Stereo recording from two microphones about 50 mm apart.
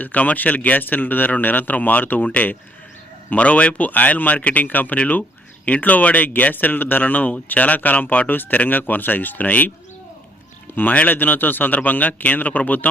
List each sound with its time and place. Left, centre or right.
0.0 s speech: left
10.8 s speech: left